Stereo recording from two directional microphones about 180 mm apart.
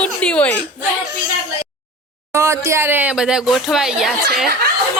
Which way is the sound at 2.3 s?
15° right (ahead or behind).